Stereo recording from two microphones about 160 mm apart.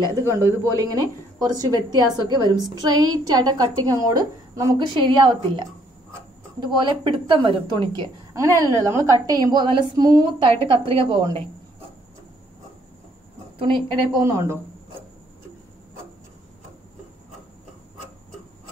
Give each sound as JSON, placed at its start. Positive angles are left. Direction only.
{"t": 0.0, "sound": "a woman's voice", "side_deg": -20}
{"t": 6.6, "sound": "a woman's voice", "side_deg": -30}
{"t": 13.6, "sound": "a woman's voice", "side_deg": -35}
{"t": 14.2, "sound": "a man's voice", "side_deg": -20}